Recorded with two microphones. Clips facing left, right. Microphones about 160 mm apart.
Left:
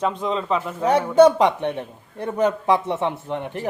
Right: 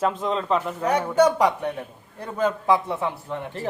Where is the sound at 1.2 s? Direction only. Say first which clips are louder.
Left 5 dB; 25° left (ahead or behind).